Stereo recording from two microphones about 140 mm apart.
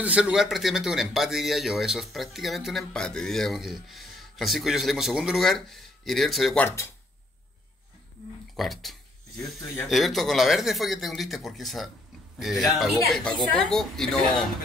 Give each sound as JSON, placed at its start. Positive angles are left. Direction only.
{"t": 0.0, "sound": "speech", "side_deg": -5}
{"t": 6.6, "sound": "speech", "side_deg": 20}
{"t": 8.5, "sound": "speech", "side_deg": 0}